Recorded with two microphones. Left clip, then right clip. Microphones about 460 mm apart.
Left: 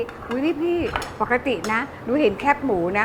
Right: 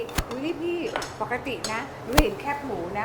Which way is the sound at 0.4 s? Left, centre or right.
Centre.